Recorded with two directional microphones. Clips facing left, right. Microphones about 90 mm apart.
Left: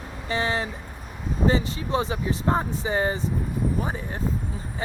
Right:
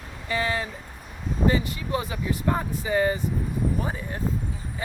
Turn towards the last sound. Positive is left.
turn(degrees=25)  # may be behind; listen again after turning